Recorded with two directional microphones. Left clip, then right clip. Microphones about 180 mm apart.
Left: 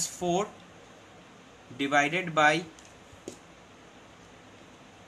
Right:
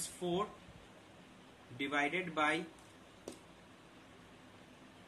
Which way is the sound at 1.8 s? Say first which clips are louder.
Left 10 dB; 60° left (ahead or behind).